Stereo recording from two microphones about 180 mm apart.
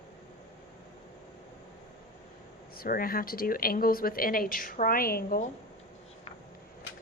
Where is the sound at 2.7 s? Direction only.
55° left (ahead or behind).